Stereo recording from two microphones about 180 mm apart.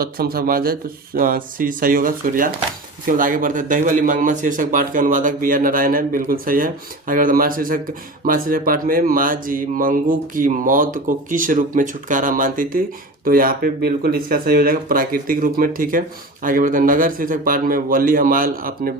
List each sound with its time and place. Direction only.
0.0 s speech: 55° right (ahead or behind)